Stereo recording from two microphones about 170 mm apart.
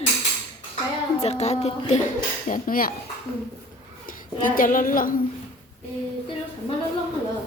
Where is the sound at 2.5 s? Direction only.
55° left (ahead or behind).